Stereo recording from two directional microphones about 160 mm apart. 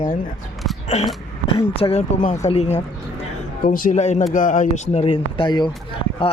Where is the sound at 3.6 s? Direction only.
60° left (ahead or behind).